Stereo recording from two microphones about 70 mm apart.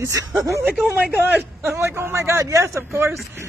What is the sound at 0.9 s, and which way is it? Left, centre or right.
A man's voice, right.